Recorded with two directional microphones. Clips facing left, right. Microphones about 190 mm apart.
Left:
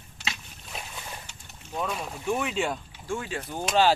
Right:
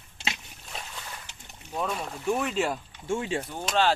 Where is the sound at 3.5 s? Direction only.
5° left (ahead or behind).